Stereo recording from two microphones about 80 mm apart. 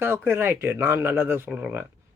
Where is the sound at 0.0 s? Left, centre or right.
Right.